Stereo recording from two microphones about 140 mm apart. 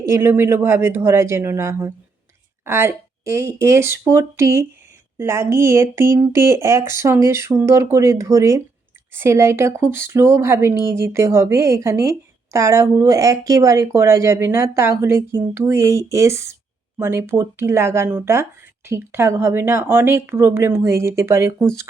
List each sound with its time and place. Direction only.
0.0 s speech: 20° right (ahead or behind)